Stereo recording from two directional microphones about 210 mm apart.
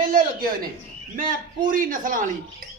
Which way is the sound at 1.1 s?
40° right (ahead or behind).